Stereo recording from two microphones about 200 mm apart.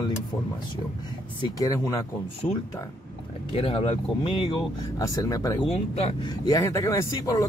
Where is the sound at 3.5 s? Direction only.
25° left (ahead or behind).